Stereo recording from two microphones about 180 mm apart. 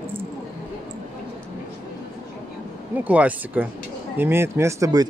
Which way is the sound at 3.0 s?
10° right (ahead or behind).